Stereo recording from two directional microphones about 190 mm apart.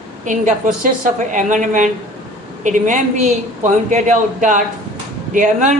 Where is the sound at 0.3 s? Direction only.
45° right (ahead or behind).